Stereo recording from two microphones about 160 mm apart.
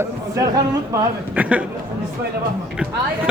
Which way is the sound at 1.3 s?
10° right (ahead or behind).